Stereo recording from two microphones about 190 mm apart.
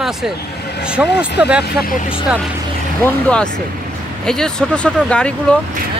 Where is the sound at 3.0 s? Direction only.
5° left (ahead or behind).